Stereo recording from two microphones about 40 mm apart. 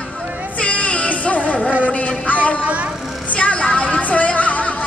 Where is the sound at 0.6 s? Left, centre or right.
Left.